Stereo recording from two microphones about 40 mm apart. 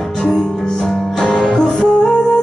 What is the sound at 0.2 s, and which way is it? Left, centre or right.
Music, centre.